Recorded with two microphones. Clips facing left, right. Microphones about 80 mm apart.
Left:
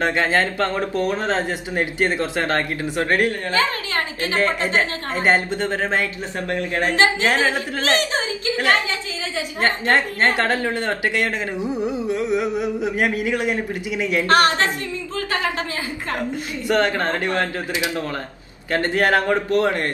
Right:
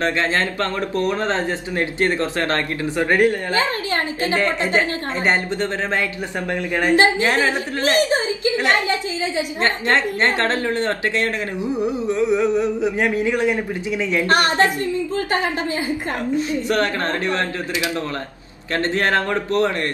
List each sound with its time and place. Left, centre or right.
0.0 s a woman's voice: left
3.0 s a woman's voice: right
4.7 s a woman's voice: left
6.5 s a woman's voice: right
7.2 s a woman's voice: left
8.1 s a woman's voice: right
9.8 s a woman's voice: left
14.3 s a woman's voice: right
16.6 s a woman's voice: left
18.7 s a woman's voice: left